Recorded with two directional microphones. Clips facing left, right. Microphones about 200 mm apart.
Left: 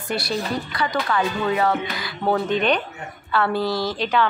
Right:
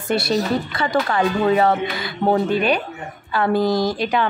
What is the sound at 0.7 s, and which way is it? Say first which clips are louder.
Speech: right 1 dB; 30° right (ahead or behind).